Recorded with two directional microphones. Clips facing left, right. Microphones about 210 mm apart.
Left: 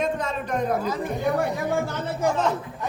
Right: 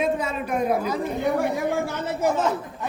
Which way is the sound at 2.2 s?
5° right (ahead or behind).